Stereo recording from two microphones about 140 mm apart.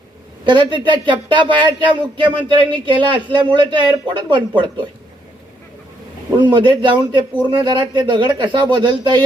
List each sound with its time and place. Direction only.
0.4 s speech: 35° right (ahead or behind)
6.4 s speech: 35° right (ahead or behind)